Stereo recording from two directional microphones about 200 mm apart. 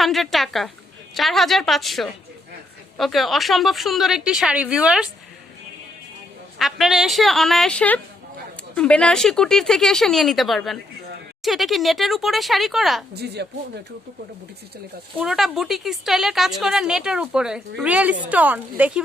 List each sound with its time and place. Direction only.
0.0 s a woman's voice: centre (ahead or behind)
6.6 s a woman's voice: centre (ahead or behind)
13.1 s speech: 55° right (ahead or behind)
15.2 s a woman's voice: centre (ahead or behind)